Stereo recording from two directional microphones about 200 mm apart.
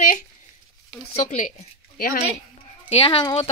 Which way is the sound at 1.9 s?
45° left (ahead or behind).